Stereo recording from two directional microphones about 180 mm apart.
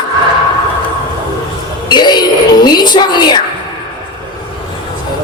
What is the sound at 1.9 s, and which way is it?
Music, 25° left (ahead or behind).